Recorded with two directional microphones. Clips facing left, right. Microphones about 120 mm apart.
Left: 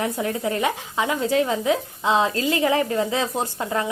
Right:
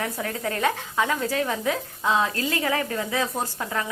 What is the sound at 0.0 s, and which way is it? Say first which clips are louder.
Speech: left 4 dB; 20° left (ahead or behind).